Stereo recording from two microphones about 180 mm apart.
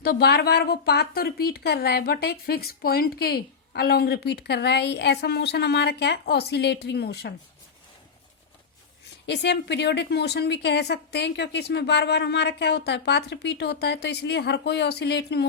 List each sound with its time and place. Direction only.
0.0 s a woman's voice: 60° left (ahead or behind)
9.2 s a woman's voice: 70° left (ahead or behind)